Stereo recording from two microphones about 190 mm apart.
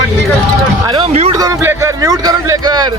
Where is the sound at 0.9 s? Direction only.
30° right (ahead or behind).